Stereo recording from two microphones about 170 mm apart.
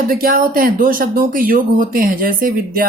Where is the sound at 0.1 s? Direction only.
55° right (ahead or behind).